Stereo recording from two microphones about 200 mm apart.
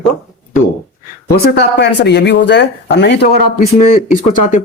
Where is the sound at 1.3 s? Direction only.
50° left (ahead or behind).